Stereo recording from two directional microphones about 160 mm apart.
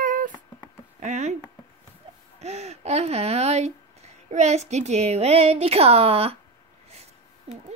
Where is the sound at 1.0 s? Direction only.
45° right (ahead or behind).